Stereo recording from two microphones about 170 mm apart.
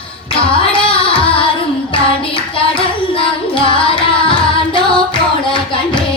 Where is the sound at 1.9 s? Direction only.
30° left (ahead or behind).